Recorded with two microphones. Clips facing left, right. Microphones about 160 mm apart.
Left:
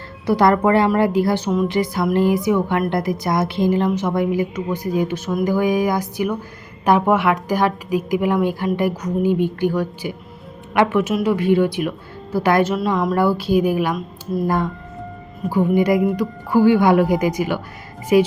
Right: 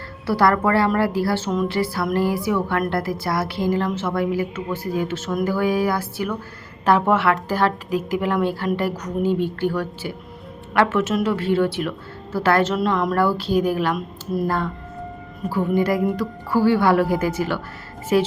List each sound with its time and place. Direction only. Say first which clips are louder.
0.3 s music: left 3 dB; 20° left (ahead or behind)
2.9 s a woman's voice: left 3 dB; 20° left (ahead or behind)